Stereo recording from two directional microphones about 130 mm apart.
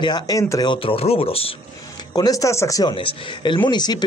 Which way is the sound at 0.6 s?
40° left (ahead or behind).